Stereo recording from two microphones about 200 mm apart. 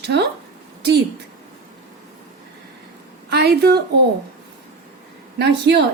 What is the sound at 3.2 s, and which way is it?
Speech, 55° right (ahead or behind).